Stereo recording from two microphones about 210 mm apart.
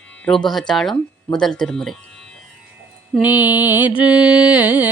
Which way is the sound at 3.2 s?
20° left (ahead or behind).